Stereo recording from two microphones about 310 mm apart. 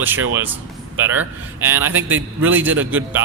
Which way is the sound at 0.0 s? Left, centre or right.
Centre.